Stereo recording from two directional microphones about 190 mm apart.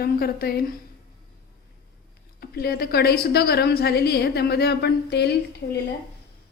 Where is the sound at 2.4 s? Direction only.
55° left (ahead or behind).